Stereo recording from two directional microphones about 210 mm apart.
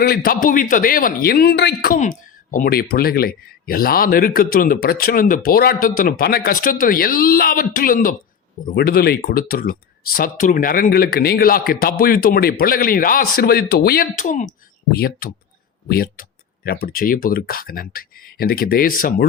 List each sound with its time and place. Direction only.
0.0 s speech: 45° left (ahead or behind)
14.9 s speech: 45° left (ahead or behind)